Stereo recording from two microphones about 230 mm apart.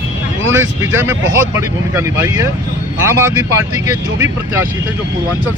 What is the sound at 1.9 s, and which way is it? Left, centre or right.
Speech, centre.